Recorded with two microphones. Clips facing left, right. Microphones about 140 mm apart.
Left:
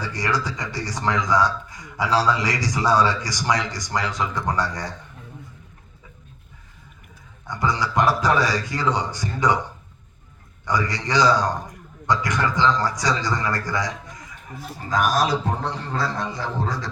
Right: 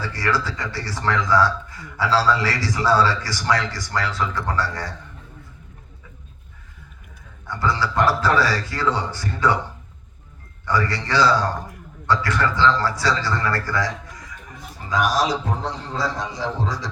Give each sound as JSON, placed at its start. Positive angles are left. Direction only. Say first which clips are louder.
{"t": 0.0, "sound": "a man's voice", "louder": "right 1 dB", "side_deg": 15}
{"t": 7.4, "sound": "a man's voice", "louder": "right 1 dB", "side_deg": 15}
{"t": 10.7, "sound": "a man's voice", "louder": "right 1 dB", "side_deg": 15}
{"t": 14.8, "sound": "a man's voice", "louder": "even", "side_deg": 45}